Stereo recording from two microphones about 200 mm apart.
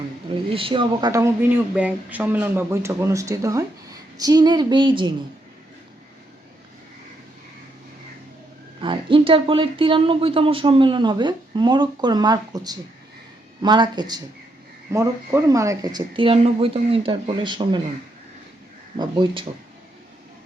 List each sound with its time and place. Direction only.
0.5 s speech: 25° right (ahead or behind)
8.8 s speech: 25° right (ahead or behind)
18.9 s speech: 25° right (ahead or behind)